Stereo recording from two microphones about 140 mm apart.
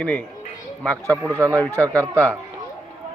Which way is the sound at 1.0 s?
20° right (ahead or behind).